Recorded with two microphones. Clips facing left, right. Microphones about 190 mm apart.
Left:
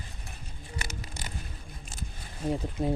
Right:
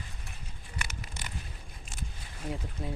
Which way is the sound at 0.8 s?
40° left (ahead or behind).